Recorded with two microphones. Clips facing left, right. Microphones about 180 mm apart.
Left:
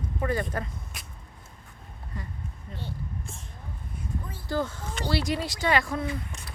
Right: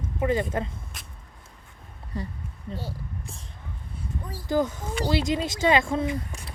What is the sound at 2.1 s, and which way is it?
Speech, 30° right (ahead or behind).